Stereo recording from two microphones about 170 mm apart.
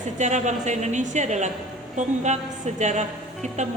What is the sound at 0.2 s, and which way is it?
A woman's voice, 45° right (ahead or behind).